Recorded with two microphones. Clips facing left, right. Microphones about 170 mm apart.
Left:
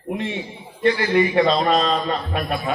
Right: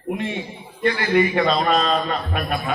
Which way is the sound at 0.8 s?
25° left (ahead or behind).